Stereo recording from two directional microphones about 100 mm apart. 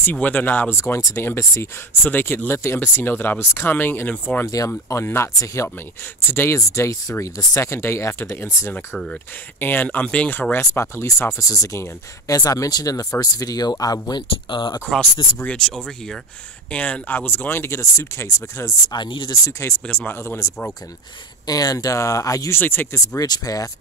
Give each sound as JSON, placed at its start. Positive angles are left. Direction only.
{"t": 0.0, "sound": "speech", "side_deg": 15}
{"t": 8.7, "sound": "speech", "side_deg": 10}
{"t": 14.2, "sound": "speech", "side_deg": 55}
{"t": 15.3, "sound": "speech", "side_deg": 10}
{"t": 18.9, "sound": "speech", "side_deg": 50}
{"t": 19.6, "sound": "speech", "side_deg": 20}
{"t": 21.5, "sound": "speech", "side_deg": 40}
{"t": 22.6, "sound": "speech", "side_deg": 20}
{"t": 22.9, "sound": "speech", "side_deg": 40}